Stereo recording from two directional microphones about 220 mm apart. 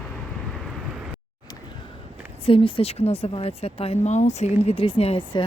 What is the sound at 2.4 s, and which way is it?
A woman's voice, 25° left (ahead or behind).